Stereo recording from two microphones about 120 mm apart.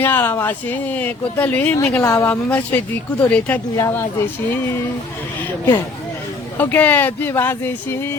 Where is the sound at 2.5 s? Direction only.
10° left (ahead or behind).